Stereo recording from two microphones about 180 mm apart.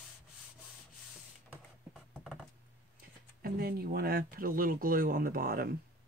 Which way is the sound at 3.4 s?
60° right (ahead or behind).